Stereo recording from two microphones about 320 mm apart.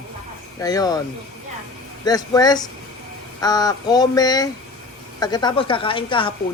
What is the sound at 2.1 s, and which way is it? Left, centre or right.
Speech, centre.